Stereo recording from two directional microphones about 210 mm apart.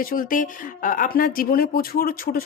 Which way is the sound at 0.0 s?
40° left (ahead or behind).